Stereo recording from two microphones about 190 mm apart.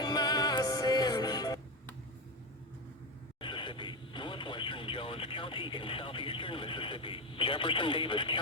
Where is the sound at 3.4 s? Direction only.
25° left (ahead or behind).